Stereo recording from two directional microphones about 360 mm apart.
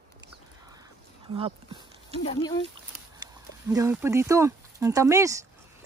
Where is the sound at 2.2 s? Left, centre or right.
Centre.